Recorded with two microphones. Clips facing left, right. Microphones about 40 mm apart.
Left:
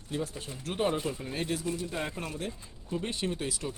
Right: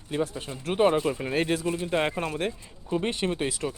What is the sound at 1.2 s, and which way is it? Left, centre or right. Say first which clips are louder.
Speech: right 7 dB; right.